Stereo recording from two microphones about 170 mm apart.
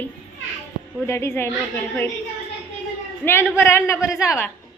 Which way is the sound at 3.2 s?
15° left (ahead or behind).